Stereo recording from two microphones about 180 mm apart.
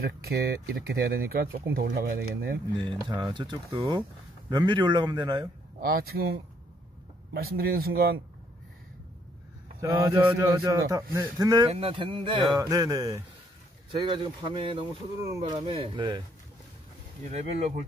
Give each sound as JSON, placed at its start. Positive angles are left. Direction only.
{"t": 0.0, "sound": "speech", "side_deg": -60}
{"t": 2.8, "sound": "a man's voice", "side_deg": -25}
{"t": 5.8, "sound": "speech", "side_deg": -55}
{"t": 7.4, "sound": "speech", "side_deg": -55}
{"t": 9.9, "sound": "a man's voice", "side_deg": -25}
{"t": 17.3, "sound": "speech", "side_deg": -40}